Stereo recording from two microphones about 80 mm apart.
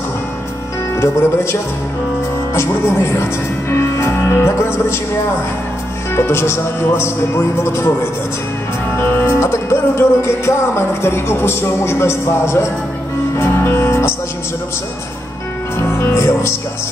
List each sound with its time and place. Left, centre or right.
0.9 s music: left
6.1 s music: left
15.9 s speech: left